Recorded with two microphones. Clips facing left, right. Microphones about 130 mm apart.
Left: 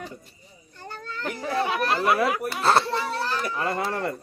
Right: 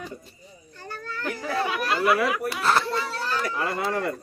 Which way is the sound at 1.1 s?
25° left (ahead or behind).